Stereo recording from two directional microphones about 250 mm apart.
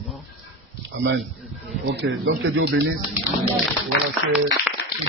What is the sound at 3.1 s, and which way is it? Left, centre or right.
Speech, centre.